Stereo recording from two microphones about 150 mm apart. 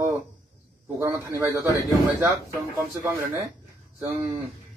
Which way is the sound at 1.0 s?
20° right (ahead or behind).